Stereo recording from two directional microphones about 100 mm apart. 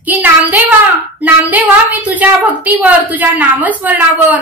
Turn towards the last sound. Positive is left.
turn(degrees=-15)  # may be behind; listen again after turning